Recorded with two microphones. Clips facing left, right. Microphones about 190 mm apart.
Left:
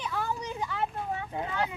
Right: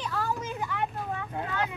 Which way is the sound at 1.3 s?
15° left (ahead or behind).